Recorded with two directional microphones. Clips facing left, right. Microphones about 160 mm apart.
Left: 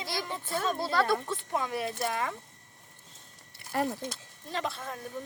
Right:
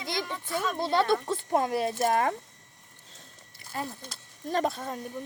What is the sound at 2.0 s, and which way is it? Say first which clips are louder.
Speech: right 9 dB; 50° right (ahead or behind).